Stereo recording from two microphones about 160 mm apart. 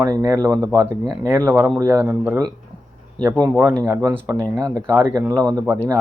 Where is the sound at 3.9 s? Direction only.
20° right (ahead or behind).